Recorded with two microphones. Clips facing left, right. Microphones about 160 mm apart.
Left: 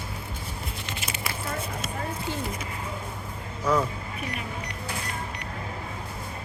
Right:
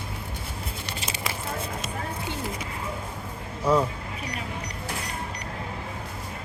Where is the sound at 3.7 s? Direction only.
30° right (ahead or behind).